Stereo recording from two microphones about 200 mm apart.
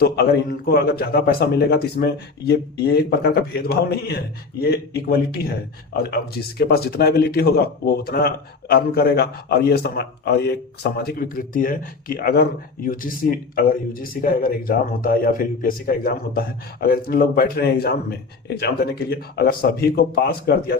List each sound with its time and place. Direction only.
0.0 s speech: 50° left (ahead or behind)